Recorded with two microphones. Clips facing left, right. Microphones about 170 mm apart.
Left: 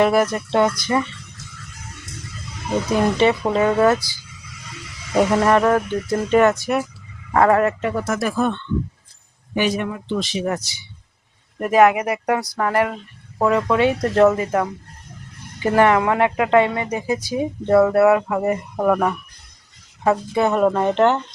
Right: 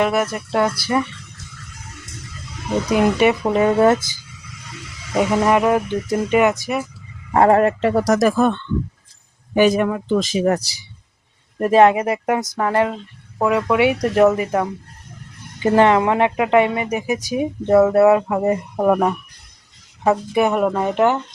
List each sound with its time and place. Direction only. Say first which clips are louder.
0.0 s a woman's voice: left 2 dB; 5° right (ahead or behind)
2.9 s speech: right 2 dB; 15° right (ahead or behind)
5.1 s a woman's voice: even; 5° right (ahead or behind)
7.3 s speech: right 2 dB; 30° right (ahead or behind); by 8.5 s 50° right (ahead or behind)
9.6 s a woman's voice: right 6 dB; 45° right (ahead or behind); by 21.2 s 10° right (ahead or behind)